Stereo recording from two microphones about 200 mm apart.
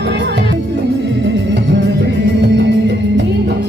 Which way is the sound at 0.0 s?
60° right (ahead or behind).